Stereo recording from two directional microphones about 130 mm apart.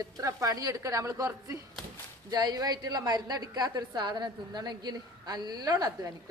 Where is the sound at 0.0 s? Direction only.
25° right (ahead or behind).